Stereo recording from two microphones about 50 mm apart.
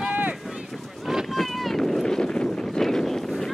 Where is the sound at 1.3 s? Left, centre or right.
Centre.